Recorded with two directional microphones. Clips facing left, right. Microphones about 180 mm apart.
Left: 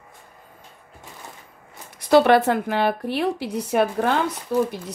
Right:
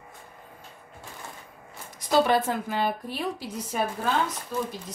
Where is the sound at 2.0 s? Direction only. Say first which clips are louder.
Left 7 dB; 65° left (ahead or behind).